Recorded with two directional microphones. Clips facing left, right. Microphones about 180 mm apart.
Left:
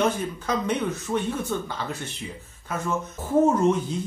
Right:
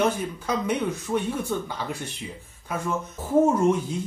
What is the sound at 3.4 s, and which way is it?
Speech, 10° right (ahead or behind).